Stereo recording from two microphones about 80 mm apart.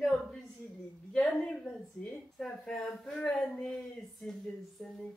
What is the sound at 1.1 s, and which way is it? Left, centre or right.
A woman's voice, centre.